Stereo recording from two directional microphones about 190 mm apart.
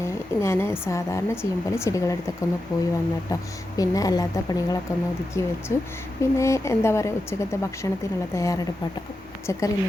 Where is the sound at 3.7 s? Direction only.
20° left (ahead or behind).